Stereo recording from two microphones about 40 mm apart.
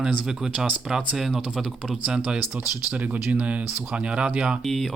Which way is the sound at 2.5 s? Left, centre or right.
Right.